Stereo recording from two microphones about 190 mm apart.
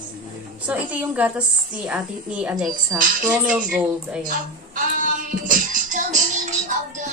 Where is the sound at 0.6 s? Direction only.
5° right (ahead or behind).